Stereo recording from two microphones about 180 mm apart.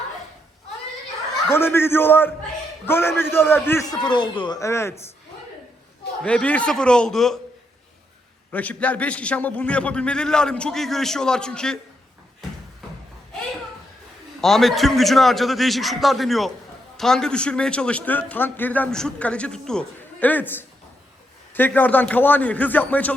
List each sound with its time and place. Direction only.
1.5 s a man's voice: 10° left (ahead or behind)
6.2 s a man's voice: 5° left (ahead or behind)
8.5 s a man's voice: 10° left (ahead or behind)
14.4 s a man's voice: centre (ahead or behind)